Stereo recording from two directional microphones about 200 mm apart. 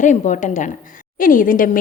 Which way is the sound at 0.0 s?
40° left (ahead or behind).